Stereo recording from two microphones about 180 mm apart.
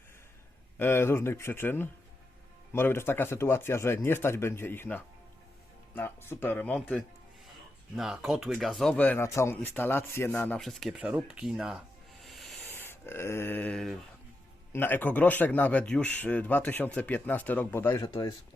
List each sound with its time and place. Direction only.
0.8 s a man's voice: 15° left (ahead or behind); by 11.8 s 5° right (ahead or behind)
12.2 s snake: centre (ahead or behind)
12.7 s a man's voice: 10° left (ahead or behind)
18.0 s speech: 25° left (ahead or behind)